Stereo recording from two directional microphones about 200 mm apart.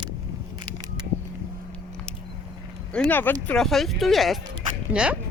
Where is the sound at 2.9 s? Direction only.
5° left (ahead or behind).